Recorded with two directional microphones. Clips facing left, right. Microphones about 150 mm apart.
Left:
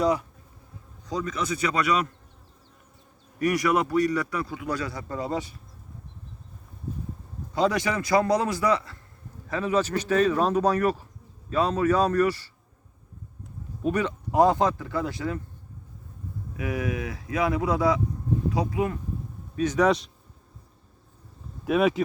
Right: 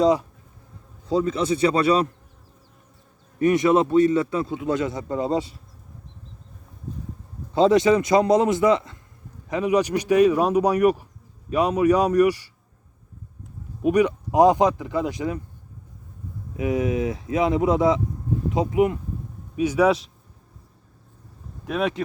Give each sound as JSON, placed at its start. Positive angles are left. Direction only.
{"t": 0.0, "sound": "a man's voice", "side_deg": -25}
{"t": 3.3, "sound": "a man's voice", "side_deg": -25}
{"t": 7.5, "sound": "a man's voice", "side_deg": -25}
{"t": 13.8, "sound": "speech", "side_deg": -15}
{"t": 16.6, "sound": "a man's voice", "side_deg": -20}
{"t": 19.5, "sound": "speech", "side_deg": -10}
{"t": 21.7, "sound": "speech", "side_deg": 5}